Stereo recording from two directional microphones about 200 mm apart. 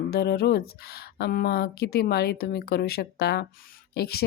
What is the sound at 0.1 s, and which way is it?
A woman's voice, 50° left (ahead or behind).